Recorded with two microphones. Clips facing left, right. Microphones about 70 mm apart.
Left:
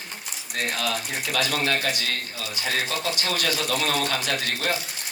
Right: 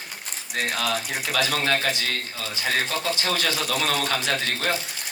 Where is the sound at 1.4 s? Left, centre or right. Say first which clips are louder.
Right 1 dB; right.